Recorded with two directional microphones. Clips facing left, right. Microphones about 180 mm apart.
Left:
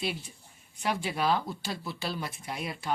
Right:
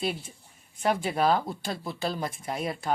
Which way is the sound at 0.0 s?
50° right (ahead or behind).